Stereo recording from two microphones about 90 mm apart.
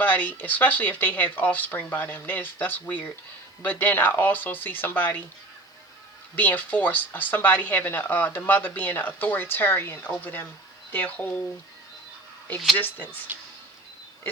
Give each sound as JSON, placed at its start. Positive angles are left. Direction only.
{"t": 0.0, "sound": "speech", "side_deg": 20}
{"t": 6.3, "sound": "speech", "side_deg": 20}
{"t": 12.7, "sound": "speech", "side_deg": 20}
{"t": 13.3, "sound": "speech", "side_deg": -25}